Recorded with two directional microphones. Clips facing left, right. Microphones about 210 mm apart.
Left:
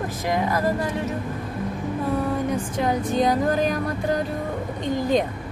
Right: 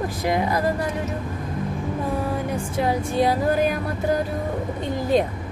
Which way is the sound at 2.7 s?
10° right (ahead or behind).